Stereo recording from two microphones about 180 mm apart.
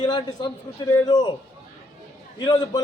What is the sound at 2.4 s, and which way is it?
Speech, 25° left (ahead or behind).